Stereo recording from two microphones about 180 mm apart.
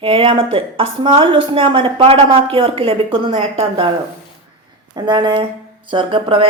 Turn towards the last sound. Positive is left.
turn(degrees=-30)  # may be behind; listen again after turning